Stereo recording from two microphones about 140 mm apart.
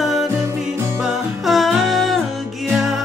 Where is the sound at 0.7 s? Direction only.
15° right (ahead or behind).